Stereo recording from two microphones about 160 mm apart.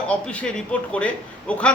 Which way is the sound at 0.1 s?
5° left (ahead or behind).